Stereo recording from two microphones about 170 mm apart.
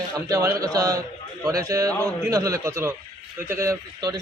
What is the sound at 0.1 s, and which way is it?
A man's voice, 20° right (ahead or behind).